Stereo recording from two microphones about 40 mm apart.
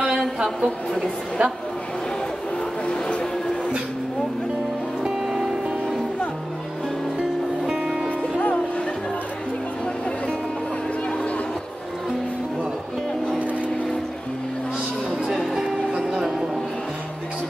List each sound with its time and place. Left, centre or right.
1.4 s a woman's voice: right
2.9 s music: left
5.3 s music: centre
7.2 s music: right
15.5 s music: centre